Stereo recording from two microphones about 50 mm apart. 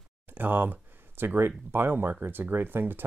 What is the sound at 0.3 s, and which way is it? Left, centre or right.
Speech, right.